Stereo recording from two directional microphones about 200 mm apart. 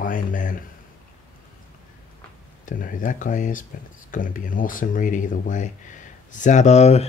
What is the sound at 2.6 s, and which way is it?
Speech, 40° left (ahead or behind).